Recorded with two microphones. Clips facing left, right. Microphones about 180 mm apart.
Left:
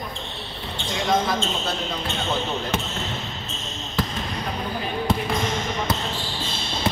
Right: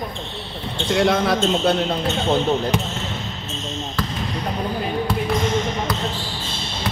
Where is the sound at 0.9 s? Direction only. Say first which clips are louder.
Right 5 dB; 70° right (ahead or behind).